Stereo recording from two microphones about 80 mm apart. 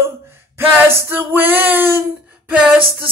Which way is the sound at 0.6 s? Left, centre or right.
Right.